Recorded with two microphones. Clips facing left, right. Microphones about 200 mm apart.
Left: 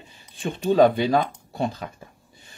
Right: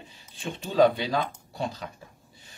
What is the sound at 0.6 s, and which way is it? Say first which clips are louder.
Speech: left 4 dB; 55° left (ahead or behind).